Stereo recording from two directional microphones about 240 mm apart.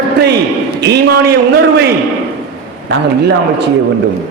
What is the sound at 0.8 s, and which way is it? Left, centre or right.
A man's voice, right.